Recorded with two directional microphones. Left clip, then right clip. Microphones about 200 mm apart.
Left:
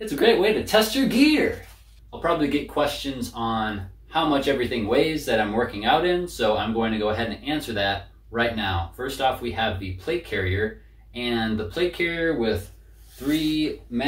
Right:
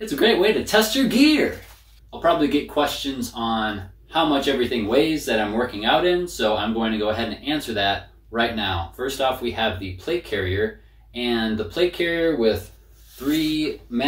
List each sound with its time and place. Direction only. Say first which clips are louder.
0.0 s speech: right 1 dB; centre (ahead or behind)
11.1 s speech: right 2 dB; centre (ahead or behind)